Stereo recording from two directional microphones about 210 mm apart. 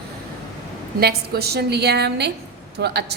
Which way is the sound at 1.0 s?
45° right (ahead or behind).